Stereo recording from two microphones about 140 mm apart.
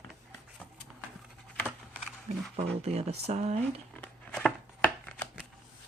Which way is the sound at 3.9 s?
10° left (ahead or behind).